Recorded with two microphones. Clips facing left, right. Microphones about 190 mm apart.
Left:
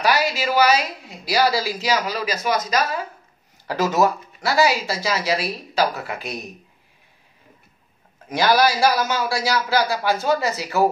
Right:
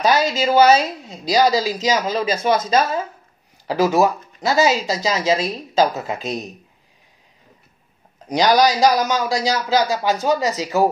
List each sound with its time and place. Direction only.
0.0 s a woman's voice: 20° right (ahead or behind)
3.6 s a woman's voice: 10° right (ahead or behind)
8.3 s a man's voice: 15° right (ahead or behind)